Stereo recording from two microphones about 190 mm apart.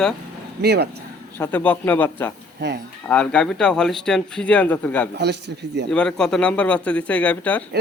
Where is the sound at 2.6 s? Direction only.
65° right (ahead or behind).